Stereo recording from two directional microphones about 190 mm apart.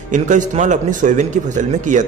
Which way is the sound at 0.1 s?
40° right (ahead or behind).